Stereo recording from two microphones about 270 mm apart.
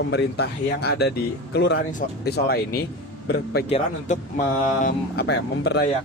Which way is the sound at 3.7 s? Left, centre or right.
Left.